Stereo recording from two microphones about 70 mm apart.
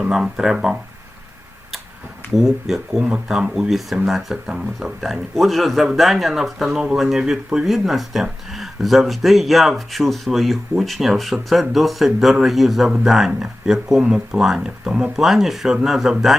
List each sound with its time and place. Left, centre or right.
0.0 s speech: centre
2.3 s speech: centre